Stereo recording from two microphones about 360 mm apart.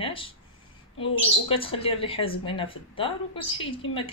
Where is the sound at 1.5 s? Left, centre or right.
Centre.